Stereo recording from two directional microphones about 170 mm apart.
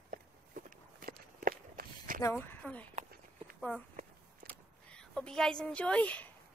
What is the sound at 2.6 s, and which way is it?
Speech, 10° left (ahead or behind).